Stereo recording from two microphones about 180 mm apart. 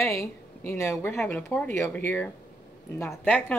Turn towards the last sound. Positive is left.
turn(degrees=10)  # may be behind; listen again after turning